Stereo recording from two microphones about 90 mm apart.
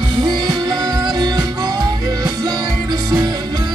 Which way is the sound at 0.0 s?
55° right (ahead or behind).